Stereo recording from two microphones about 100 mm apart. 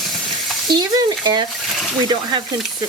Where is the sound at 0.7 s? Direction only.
45° right (ahead or behind).